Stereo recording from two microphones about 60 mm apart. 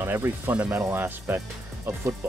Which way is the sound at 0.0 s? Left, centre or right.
Right.